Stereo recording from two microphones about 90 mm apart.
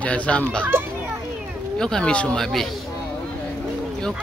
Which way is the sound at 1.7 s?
10° left (ahead or behind).